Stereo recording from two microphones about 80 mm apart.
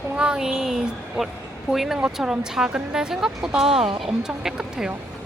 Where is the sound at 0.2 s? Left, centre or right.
Centre.